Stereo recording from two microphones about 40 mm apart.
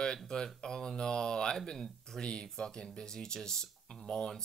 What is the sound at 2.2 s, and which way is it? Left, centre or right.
Speech, left.